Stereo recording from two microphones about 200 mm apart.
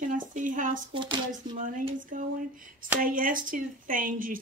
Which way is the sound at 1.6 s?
40° right (ahead or behind).